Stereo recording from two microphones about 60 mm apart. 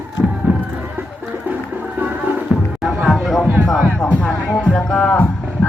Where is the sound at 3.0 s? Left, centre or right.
Centre.